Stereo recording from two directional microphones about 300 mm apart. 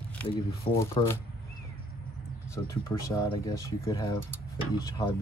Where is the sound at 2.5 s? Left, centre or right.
Centre.